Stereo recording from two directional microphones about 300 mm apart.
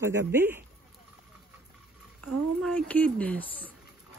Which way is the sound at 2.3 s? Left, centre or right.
Centre.